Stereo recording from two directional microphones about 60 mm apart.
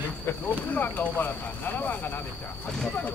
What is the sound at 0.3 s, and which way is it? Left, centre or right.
Speech, left.